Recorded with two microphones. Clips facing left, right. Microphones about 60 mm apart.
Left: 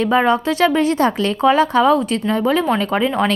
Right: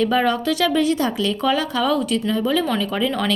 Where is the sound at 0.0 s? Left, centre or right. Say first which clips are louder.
Left 3 dB; left.